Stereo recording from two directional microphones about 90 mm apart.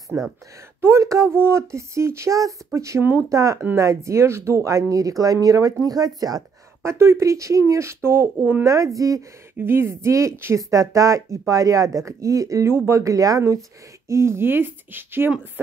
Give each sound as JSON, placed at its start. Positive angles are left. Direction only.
{"t": 0.7, "sound": "speech", "side_deg": -30}
{"t": 3.0, "sound": "speech", "side_deg": -20}
{"t": 3.3, "sound": "speech", "side_deg": -35}
{"t": 6.8, "sound": "speech", "side_deg": -30}
{"t": 9.6, "sound": "speech", "side_deg": -25}